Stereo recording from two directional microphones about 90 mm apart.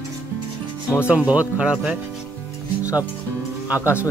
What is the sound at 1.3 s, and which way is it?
Speech, 15° right (ahead or behind).